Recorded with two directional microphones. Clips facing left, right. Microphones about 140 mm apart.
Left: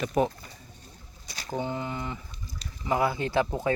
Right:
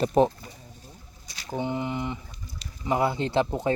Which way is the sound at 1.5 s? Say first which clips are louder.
Right 3 dB; 20° right (ahead or behind).